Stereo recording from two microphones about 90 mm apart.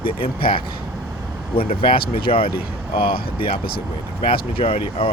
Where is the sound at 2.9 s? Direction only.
75° left (ahead or behind).